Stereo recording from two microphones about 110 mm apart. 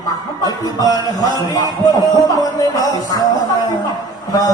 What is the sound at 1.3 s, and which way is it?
Speech, 35° left (ahead or behind).